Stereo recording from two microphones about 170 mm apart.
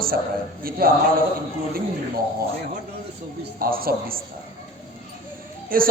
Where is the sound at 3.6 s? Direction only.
60° right (ahead or behind).